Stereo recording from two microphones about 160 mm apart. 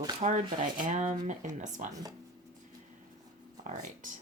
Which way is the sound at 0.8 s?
50° right (ahead or behind).